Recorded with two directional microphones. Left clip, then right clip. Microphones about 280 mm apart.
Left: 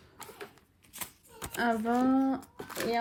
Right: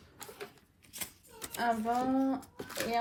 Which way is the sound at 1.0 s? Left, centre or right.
Centre.